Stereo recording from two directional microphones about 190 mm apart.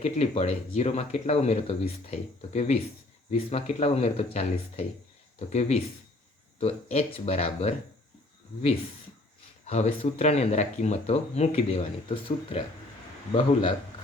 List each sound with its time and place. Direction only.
0.0 s speech: 35° left (ahead or behind)
9.6 s a man's voice: 35° left (ahead or behind)